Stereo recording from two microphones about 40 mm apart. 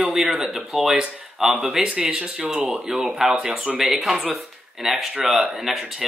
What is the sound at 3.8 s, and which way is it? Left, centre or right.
Speech, centre.